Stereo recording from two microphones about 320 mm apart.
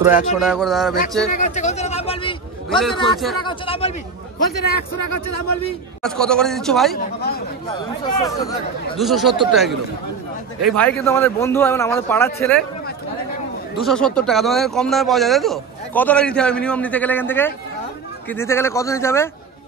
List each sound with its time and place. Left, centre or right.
0.1 s speech: centre
1.3 s a sound: left
2.8 s speech: centre
3.4 s a man's voice: centre
4.4 s speech: left
6.0 s speech: centre
7.0 s speech: left
7.6 s a man's voice: centre
8.9 s speech: centre
10.7 s a man's voice: centre
13.8 s a man's voice: centre